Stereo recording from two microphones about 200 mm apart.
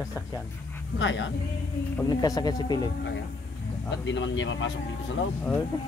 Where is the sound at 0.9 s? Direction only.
65° left (ahead or behind).